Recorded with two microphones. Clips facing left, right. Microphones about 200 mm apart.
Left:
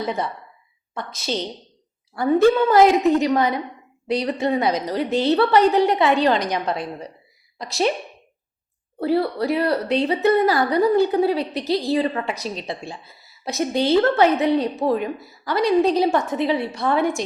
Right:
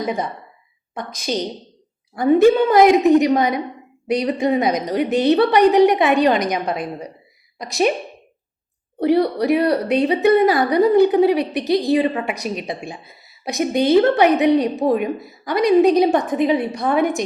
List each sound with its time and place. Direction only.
0.0 s a woman's voice: 15° right (ahead or behind)
9.0 s a woman's voice: 20° right (ahead or behind)